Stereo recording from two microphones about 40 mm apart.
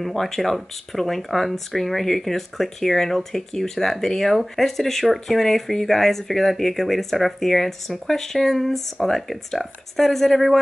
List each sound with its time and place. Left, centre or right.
0.0 s speech: centre